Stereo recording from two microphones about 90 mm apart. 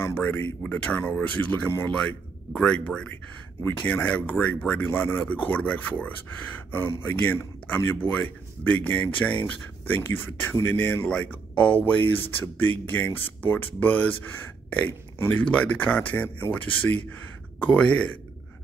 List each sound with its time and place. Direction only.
0.0 s speech: 25° left (ahead or behind)